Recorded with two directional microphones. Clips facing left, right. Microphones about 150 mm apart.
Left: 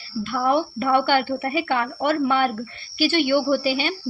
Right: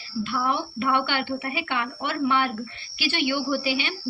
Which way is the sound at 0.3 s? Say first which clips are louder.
Left 7 dB; 50° left (ahead or behind).